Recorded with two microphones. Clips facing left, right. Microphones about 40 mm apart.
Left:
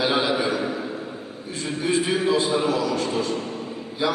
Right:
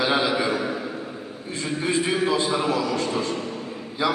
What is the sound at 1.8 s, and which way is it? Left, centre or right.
Speech, right.